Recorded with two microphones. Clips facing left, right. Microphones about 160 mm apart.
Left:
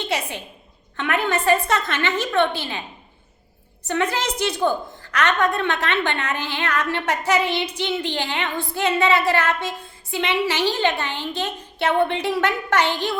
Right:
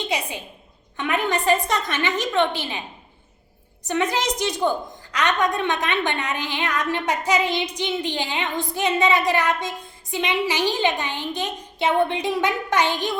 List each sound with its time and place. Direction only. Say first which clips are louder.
0.1 s a woman's voice: left 1 dB; 15° right (ahead or behind)
3.8 s a woman's voice: even; 15° right (ahead or behind)